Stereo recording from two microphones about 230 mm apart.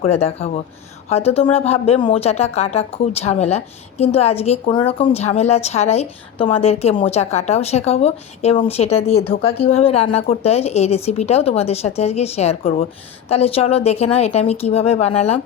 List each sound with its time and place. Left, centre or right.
0.0 s speech: left